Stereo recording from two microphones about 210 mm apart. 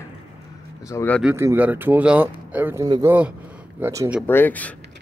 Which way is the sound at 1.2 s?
10° right (ahead or behind).